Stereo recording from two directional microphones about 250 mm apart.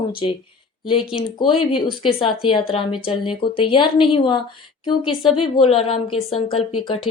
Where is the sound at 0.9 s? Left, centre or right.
Centre.